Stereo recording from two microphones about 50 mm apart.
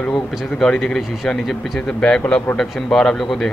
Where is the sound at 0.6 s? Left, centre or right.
Centre.